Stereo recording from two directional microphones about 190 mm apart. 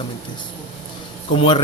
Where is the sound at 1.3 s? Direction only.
25° left (ahead or behind).